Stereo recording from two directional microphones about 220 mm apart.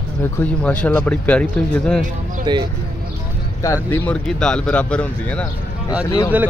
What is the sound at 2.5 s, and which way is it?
Speech, 20° right (ahead or behind).